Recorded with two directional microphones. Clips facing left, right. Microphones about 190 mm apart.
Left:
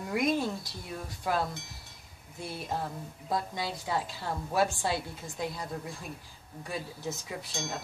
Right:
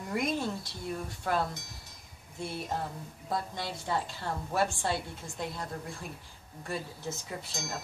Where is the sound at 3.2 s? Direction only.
5° left (ahead or behind).